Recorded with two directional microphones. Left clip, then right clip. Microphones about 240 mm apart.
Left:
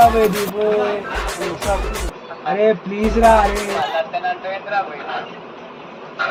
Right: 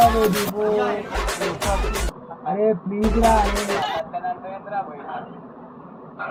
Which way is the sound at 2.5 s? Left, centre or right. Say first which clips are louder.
Left 5 dB; left.